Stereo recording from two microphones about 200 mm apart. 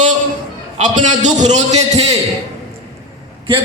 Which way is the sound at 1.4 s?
35° right (ahead or behind).